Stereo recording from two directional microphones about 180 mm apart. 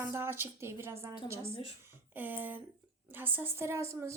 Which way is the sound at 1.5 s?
30° left (ahead or behind).